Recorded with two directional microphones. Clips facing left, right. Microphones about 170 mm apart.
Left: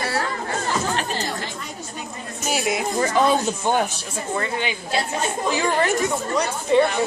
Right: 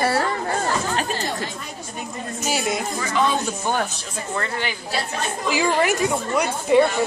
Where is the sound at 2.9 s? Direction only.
40° left (ahead or behind).